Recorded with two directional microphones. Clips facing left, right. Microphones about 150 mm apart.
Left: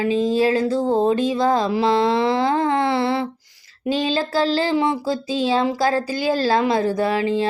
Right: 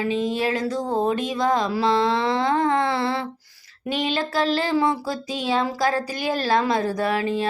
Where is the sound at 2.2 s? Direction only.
30° left (ahead or behind).